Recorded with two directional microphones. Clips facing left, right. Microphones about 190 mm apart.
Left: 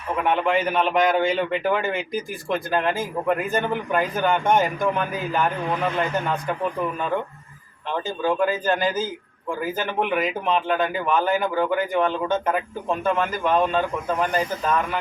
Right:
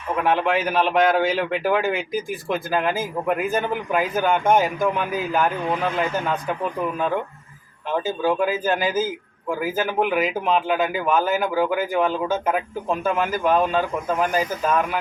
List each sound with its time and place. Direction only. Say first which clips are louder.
0.2 s a man's voice: right 1 dB; centre (ahead or behind)
7.9 s a man's voice: right 2 dB; 5° right (ahead or behind)